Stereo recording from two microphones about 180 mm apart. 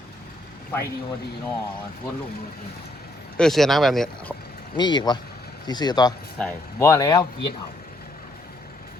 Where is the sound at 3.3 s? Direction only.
Centre (ahead or behind).